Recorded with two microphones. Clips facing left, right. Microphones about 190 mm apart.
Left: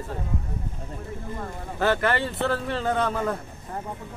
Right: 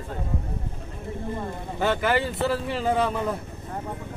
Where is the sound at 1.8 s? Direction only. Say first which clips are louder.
Even; centre (ahead or behind).